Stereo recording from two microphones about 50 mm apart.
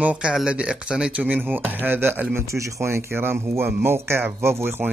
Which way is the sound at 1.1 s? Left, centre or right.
Right.